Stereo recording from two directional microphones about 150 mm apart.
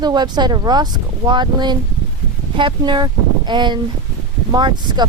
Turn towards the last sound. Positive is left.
turn(degrees=-30)  # may be behind; listen again after turning